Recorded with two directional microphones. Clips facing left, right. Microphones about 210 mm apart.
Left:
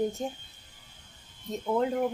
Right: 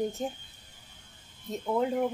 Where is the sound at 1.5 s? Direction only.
Centre (ahead or behind).